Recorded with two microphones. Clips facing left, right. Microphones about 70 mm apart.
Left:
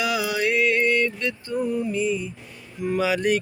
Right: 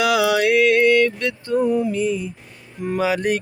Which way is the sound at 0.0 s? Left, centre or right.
Right.